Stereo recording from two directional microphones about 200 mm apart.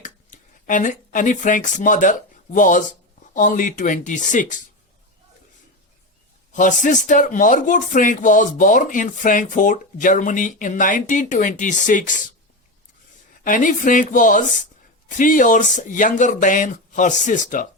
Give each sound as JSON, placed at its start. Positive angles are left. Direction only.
{"t": 0.0, "sound": "speech", "side_deg": 40}
{"t": 6.5, "sound": "speech", "side_deg": 40}
{"t": 13.4, "sound": "speech", "side_deg": 40}